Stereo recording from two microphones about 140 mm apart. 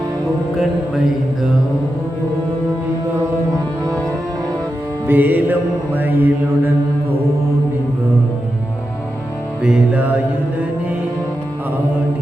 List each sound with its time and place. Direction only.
5.0 s music: 15° right (ahead or behind)
9.6 s music: 5° right (ahead or behind)